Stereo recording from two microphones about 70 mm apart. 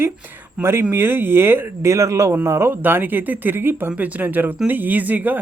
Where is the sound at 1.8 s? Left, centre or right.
Right.